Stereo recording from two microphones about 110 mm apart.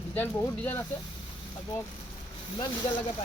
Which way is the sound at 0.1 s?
15° left (ahead or behind).